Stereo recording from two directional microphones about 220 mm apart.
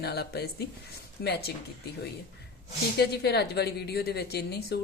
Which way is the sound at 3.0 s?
50° left (ahead or behind).